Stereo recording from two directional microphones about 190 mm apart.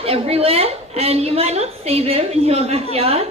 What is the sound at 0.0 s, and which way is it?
A woman's voice, 30° right (ahead or behind).